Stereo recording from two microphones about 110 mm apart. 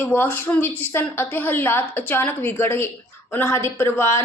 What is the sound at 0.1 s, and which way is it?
A woman's voice, 15° left (ahead or behind).